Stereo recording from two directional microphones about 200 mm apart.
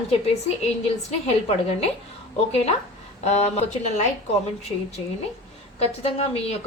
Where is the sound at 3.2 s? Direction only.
35° left (ahead or behind).